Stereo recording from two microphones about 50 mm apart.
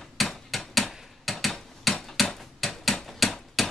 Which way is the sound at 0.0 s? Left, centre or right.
Centre.